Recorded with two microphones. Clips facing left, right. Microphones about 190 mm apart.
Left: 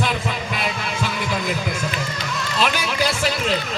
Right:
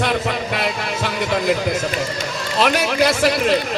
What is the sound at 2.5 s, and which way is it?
A man's voice, 65° right (ahead or behind).